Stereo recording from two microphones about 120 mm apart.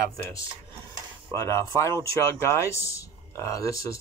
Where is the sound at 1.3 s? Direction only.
25° left (ahead or behind).